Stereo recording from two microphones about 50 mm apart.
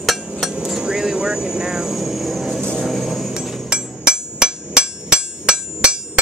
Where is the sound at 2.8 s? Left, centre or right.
Centre.